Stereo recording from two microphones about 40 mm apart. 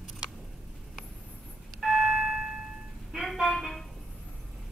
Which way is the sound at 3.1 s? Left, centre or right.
Centre.